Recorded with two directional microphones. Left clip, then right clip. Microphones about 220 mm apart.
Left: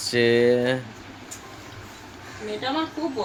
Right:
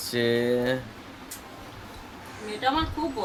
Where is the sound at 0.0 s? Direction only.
10° left (ahead or behind).